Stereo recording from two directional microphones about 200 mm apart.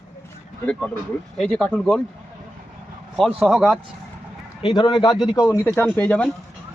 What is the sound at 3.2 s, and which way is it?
Speech, centre (ahead or behind).